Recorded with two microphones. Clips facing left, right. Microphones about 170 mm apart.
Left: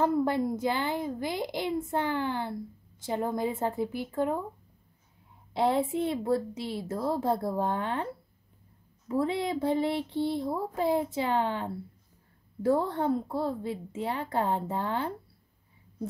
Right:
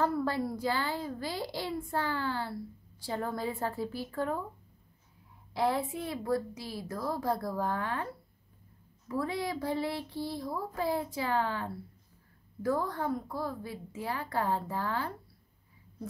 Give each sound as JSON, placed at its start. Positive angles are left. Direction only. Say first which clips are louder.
{"t": 0.0, "sound": "a woman's voice", "louder": "left 4 dB", "side_deg": 20}
{"t": 5.5, "sound": "a woman's voice", "louder": "left 4 dB", "side_deg": 20}